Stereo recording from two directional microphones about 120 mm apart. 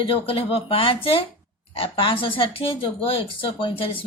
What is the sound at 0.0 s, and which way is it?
Speech, 50° left (ahead or behind).